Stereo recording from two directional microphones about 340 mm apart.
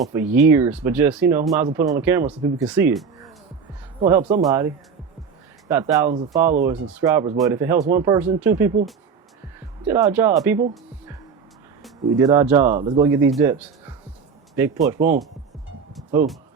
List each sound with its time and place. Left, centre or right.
0.0 s speech: centre
4.0 s speech: centre
9.8 s speech: centre
11.8 s speech: centre
14.9 s speech: right
16.0 s music: centre